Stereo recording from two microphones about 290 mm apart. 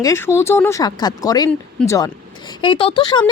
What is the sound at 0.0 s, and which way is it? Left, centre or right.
A woman's voice, centre.